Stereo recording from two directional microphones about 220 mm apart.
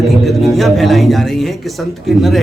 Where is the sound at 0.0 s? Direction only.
Centre (ahead or behind).